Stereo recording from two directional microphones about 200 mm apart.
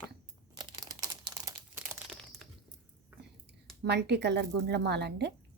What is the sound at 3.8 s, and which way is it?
A woman's voice, 55° right (ahead or behind).